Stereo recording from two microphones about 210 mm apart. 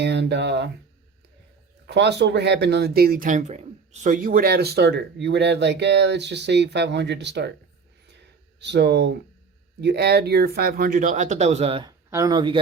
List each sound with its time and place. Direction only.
0.0 s speech: 55° right (ahead or behind)
1.9 s speech: 55° right (ahead or behind)
8.6 s speech: 55° right (ahead or behind); by 12.5 s 20° right (ahead or behind)